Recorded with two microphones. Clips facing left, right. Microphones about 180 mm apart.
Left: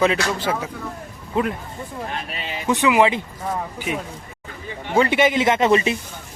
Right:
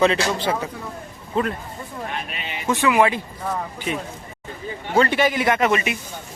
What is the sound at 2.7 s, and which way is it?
Speech, 20° left (ahead or behind).